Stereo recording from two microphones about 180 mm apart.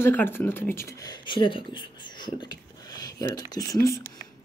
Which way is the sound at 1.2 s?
25° left (ahead or behind).